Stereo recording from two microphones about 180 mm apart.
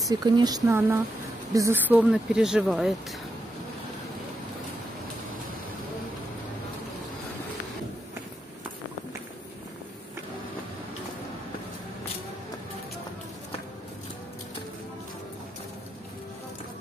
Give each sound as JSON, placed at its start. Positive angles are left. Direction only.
{"t": 0.0, "sound": "speech", "side_deg": -20}